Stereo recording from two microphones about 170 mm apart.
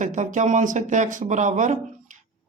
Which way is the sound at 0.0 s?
45° right (ahead or behind).